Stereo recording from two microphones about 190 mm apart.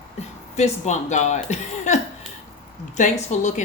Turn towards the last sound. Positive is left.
turn(degrees=40)  # may be behind; listen again after turning